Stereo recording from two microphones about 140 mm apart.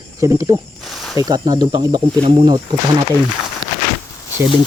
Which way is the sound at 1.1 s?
30° right (ahead or behind).